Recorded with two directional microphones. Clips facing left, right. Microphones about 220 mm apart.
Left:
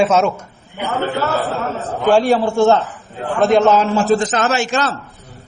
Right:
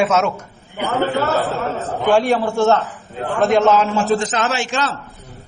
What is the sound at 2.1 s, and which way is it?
A man's voice, 30° left (ahead or behind).